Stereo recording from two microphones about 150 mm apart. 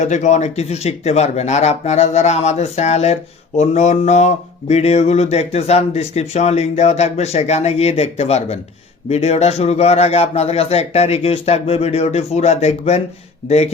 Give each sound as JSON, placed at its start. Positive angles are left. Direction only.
{"t": 0.0, "sound": "a man's voice", "side_deg": 50}